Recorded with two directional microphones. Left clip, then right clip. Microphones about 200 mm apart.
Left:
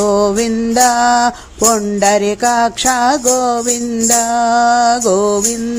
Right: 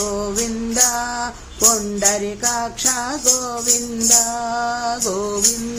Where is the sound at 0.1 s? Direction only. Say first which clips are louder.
Left 10 dB; 35° left (ahead or behind).